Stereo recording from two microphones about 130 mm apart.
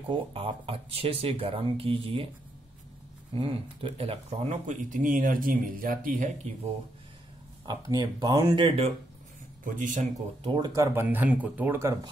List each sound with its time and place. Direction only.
0.1 s speech: 45° right (ahead or behind)
3.3 s speech: 45° right (ahead or behind); by 6.5 s 80° right
7.6 s speech: 30° right (ahead or behind)
8.5 s speech: 45° right (ahead or behind)
9.8 s speech: 85° right
10.4 s speech: 40° right (ahead or behind)
10.7 s speech: 20° right (ahead or behind)